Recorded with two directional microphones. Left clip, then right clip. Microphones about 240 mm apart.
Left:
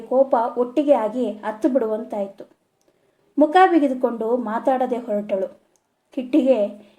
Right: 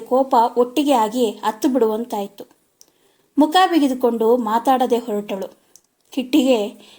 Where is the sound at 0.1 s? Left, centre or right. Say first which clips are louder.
Right 2 dB; right.